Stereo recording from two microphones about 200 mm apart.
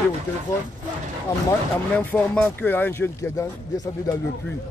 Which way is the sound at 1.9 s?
5° left (ahead or behind).